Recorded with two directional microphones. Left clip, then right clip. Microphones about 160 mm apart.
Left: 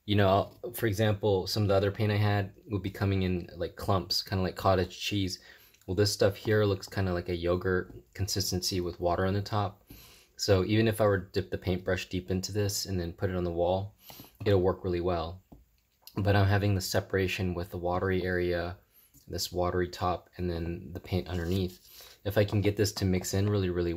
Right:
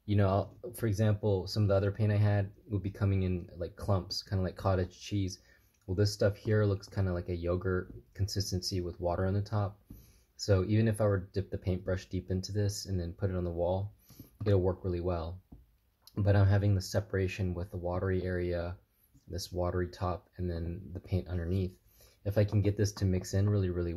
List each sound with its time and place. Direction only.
0.0 s speech: 20° left (ahead or behind)
19.3 s speech: 35° left (ahead or behind)
19.6 s speech: 20° left (ahead or behind)